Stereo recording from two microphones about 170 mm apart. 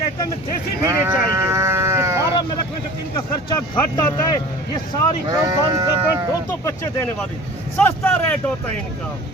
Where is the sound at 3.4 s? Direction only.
30° left (ahead or behind).